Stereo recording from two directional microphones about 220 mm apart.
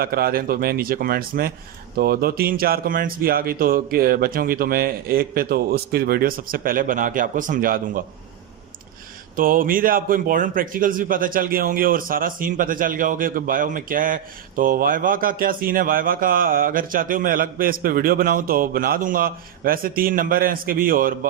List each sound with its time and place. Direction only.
0.0 s a man's voice: 45° right (ahead or behind)
9.3 s a man's voice: 40° right (ahead or behind)